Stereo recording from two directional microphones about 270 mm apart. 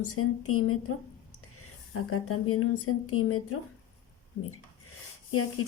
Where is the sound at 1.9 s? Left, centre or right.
Left.